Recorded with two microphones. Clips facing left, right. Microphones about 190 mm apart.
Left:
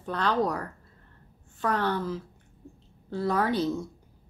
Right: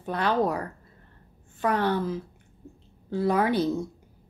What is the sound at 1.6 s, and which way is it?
A woman's voice, 10° right (ahead or behind).